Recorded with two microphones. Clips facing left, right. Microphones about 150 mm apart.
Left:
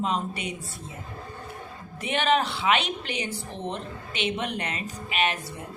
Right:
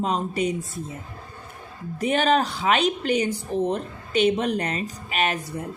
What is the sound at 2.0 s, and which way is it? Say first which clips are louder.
A woman's voice: right 4 dB; 40° right (ahead or behind).